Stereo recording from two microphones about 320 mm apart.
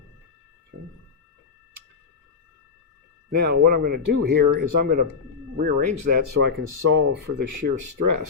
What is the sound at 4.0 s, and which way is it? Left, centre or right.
Speech, right.